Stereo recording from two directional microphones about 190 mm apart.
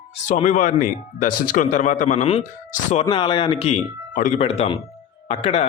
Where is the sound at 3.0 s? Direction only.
25° left (ahead or behind).